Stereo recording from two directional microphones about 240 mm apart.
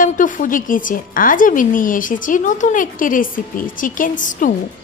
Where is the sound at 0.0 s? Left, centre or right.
Left.